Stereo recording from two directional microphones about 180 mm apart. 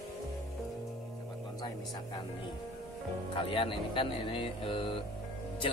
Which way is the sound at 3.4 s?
30° left (ahead or behind).